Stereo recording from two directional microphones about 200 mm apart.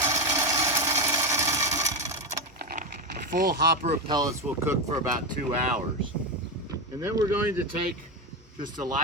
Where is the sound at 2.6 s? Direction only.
45° right (ahead or behind).